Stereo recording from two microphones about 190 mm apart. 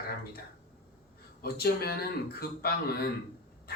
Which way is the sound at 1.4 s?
55° left (ahead or behind).